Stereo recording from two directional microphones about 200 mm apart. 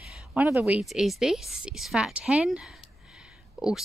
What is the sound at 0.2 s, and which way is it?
A woman's voice, 5° right (ahead or behind).